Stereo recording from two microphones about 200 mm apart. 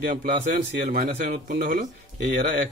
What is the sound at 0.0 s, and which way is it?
Speech, 45° right (ahead or behind).